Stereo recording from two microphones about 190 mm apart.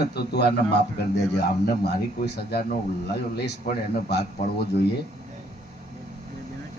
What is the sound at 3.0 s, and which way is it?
Speech, 60° left (ahead or behind).